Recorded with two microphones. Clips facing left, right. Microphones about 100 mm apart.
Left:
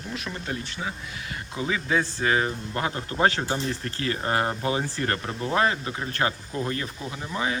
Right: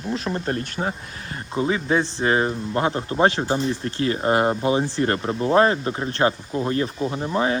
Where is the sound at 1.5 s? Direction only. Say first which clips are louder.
Right 5 dB; 30° right (ahead or behind).